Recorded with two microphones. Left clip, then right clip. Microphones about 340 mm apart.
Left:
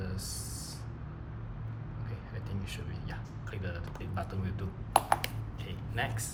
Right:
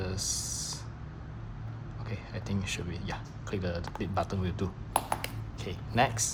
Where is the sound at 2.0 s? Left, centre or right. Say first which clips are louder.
Right 8 dB; centre.